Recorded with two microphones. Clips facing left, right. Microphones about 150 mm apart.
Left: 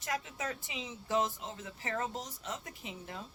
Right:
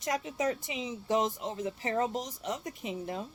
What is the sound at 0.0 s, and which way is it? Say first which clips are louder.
A woman's voice: right 7 dB; 20° right (ahead or behind).